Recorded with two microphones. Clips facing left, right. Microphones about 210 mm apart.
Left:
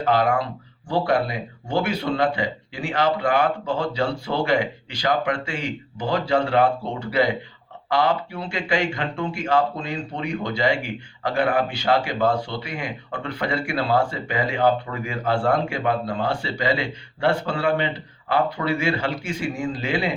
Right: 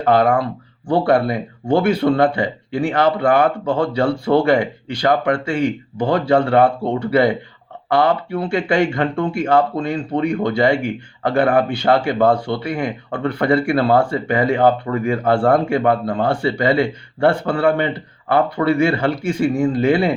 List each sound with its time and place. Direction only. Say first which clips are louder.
0.0 s speech: right 5 dB; 55° right (ahead or behind)
7.9 s speech: right 5 dB; 55° right (ahead or behind)